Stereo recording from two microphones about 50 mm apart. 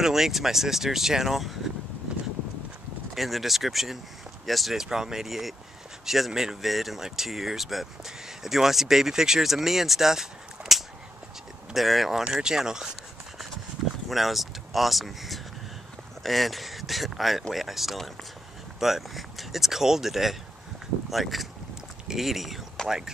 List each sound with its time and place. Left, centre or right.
0.0 s speech: centre
3.2 s speech: centre
12.3 s speech: centre
14.0 s speech: centre